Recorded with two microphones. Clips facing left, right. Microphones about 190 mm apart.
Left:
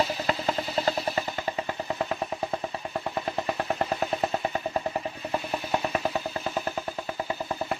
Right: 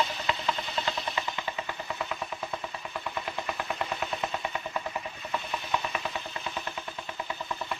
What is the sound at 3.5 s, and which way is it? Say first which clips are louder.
Vehicle: left 6 dB; 35° left (ahead or behind).